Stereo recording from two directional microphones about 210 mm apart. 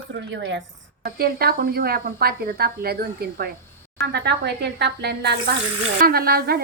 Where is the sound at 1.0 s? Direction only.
45° right (ahead or behind).